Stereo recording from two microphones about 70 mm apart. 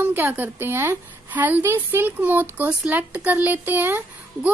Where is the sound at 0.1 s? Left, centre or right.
Right.